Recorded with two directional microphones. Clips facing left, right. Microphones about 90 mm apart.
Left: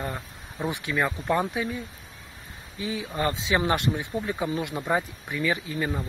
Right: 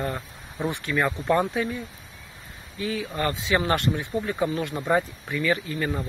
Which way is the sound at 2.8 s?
20° left (ahead or behind).